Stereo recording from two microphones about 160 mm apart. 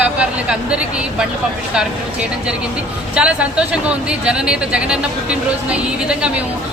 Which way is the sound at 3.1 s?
5° right (ahead or behind).